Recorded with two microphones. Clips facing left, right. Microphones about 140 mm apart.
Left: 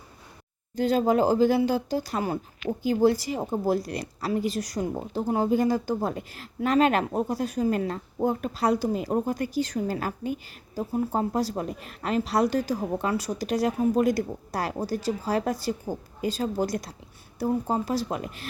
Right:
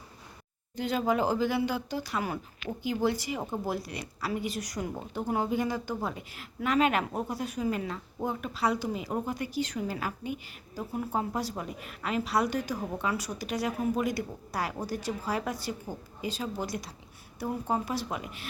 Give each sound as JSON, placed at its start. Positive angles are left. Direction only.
{"t": 0.8, "sound": "a woman's voice", "side_deg": 40}